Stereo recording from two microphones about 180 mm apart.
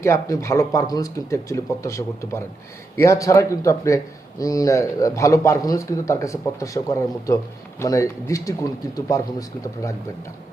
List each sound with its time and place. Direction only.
0.0 s speech: 15° left (ahead or behind)